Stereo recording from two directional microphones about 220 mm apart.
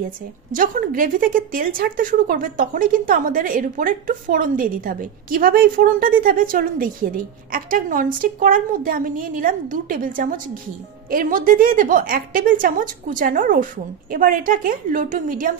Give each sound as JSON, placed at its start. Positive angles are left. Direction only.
{"t": 0.5, "sound": "speech", "side_deg": -35}